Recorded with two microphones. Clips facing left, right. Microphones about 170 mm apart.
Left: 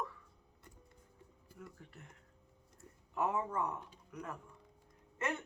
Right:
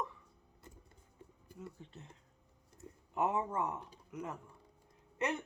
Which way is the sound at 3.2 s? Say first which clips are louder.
Right 1 dB; 20° right (ahead or behind).